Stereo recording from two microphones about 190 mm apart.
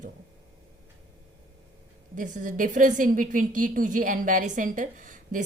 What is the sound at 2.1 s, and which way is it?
A woman's voice, 40° right (ahead or behind).